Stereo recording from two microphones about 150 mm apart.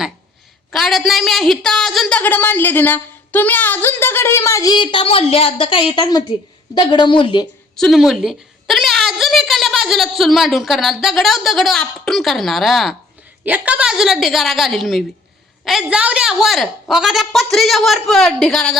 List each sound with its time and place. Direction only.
0.7 s a woman's voice: centre (ahead or behind); by 7.4 s 35° left (ahead or behind)
7.8 s a woman's voice: centre (ahead or behind)